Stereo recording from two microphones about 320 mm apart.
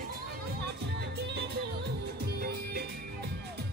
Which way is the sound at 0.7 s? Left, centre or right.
Right.